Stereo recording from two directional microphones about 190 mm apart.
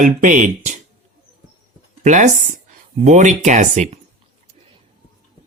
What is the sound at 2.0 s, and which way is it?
Speech, 40° right (ahead or behind).